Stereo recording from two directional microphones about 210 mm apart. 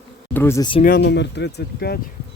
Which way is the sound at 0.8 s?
45° left (ahead or behind).